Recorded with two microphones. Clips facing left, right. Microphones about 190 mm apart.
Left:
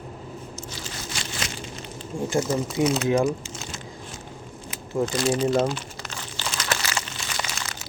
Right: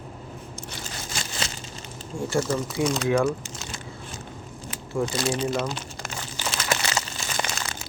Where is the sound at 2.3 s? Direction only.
10° left (ahead or behind).